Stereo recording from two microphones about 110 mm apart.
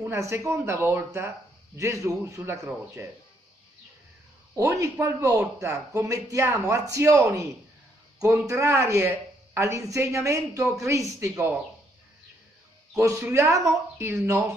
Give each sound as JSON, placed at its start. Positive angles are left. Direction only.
{"t": 0.0, "sound": "speech", "side_deg": -25}
{"t": 4.6, "sound": "speech", "side_deg": -25}
{"t": 13.2, "sound": "speech", "side_deg": -25}